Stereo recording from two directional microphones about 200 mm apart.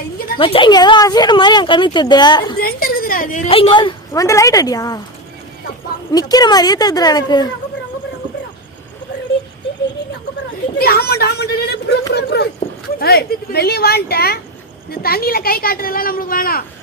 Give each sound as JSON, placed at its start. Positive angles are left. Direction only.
{"t": 0.3, "sound": "speech", "side_deg": 25}
{"t": 2.6, "sound": "a sound", "side_deg": 45}
{"t": 3.5, "sound": "a woman's voice", "side_deg": 25}
{"t": 6.1, "sound": "speech", "side_deg": 20}
{"t": 10.8, "sound": "a woman's voice", "side_deg": 50}